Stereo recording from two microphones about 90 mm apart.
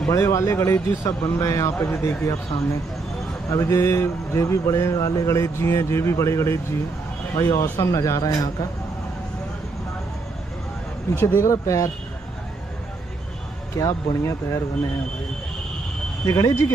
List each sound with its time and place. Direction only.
0.1 s speech: 35° left (ahead or behind)
3.4 s speech: 30° left (ahead or behind)
11.1 s speech: 25° left (ahead or behind)
13.7 s speech: 35° left (ahead or behind)
16.3 s speech: 40° left (ahead or behind)